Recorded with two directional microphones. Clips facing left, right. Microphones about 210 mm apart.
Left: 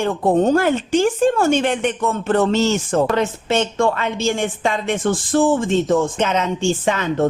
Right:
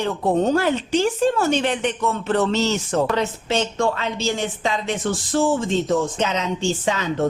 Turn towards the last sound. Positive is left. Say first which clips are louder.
# left 3 dB
turn(degrees=55)  # may be behind; listen again after turning